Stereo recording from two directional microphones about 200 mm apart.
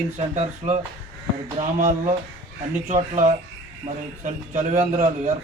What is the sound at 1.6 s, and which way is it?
A man's voice, 40° right (ahead or behind).